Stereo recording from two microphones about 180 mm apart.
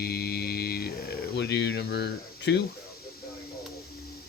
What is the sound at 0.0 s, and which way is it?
Mantra, 60° left (ahead or behind).